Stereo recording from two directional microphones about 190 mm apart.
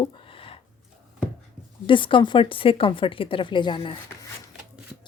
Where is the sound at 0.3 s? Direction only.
30° left (ahead or behind).